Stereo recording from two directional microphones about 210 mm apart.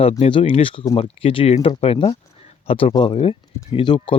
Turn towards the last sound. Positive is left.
turn(degrees=25)  # may be behind; listen again after turning